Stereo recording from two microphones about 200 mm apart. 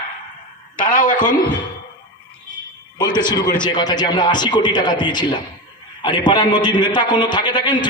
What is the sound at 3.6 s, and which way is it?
A man's voice, 20° left (ahead or behind).